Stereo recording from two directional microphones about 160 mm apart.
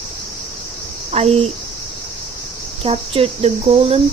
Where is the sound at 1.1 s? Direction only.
40° right (ahead or behind).